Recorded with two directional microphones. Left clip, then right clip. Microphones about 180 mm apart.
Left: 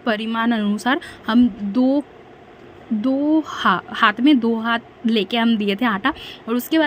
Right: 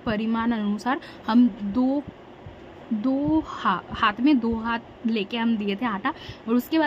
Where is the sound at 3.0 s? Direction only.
15° left (ahead or behind).